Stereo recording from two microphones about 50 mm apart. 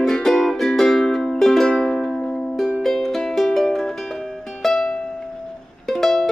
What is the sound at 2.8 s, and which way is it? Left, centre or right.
Music, centre.